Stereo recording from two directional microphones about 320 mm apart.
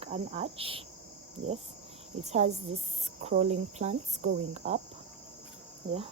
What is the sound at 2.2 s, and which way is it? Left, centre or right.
Cricket, right.